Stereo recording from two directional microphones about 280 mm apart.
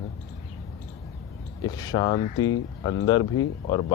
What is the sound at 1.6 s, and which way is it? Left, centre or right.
Speech, centre.